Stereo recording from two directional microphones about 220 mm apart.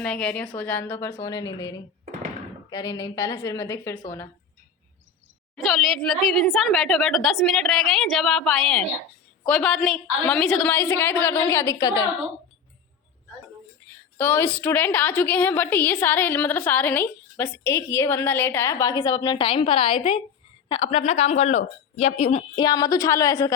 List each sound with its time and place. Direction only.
0.0 s a woman's voice: 5° left (ahead or behind)
5.6 s a woman's voice: centre (ahead or behind)
13.9 s a woman's voice: 10° left (ahead or behind)